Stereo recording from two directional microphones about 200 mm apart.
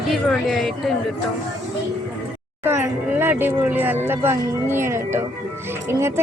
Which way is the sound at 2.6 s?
10° right (ahead or behind).